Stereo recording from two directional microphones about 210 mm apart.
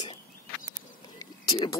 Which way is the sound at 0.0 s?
35° left (ahead or behind).